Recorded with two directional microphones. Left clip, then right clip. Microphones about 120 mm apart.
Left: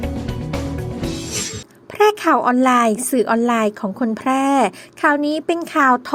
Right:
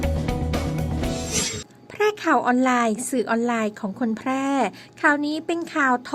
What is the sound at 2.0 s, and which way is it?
A woman's voice, 35° left (ahead or behind).